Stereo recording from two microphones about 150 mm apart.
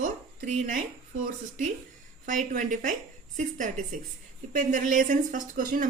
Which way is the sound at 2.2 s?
60° right (ahead or behind).